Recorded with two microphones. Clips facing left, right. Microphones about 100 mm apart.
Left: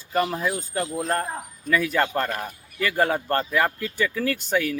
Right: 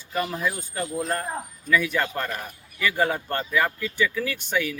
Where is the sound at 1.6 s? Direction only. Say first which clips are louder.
Left 1 dB; 40° left (ahead or behind).